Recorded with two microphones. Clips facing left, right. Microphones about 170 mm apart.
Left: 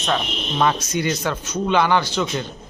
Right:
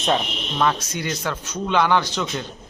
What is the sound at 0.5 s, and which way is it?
A man's voice, 15° left (ahead or behind).